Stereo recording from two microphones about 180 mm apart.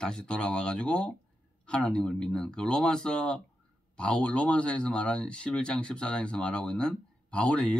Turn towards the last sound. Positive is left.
turn(degrees=5)  # may be behind; listen again after turning